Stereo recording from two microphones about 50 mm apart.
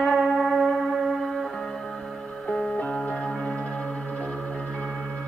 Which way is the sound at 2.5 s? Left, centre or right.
Left.